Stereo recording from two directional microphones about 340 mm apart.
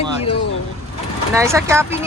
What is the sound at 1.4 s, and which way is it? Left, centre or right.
Speech, centre.